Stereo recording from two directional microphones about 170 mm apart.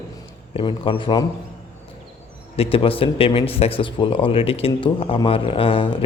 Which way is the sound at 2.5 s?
35° left (ahead or behind).